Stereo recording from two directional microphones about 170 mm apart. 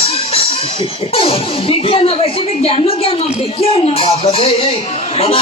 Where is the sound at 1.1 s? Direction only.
35° left (ahead or behind).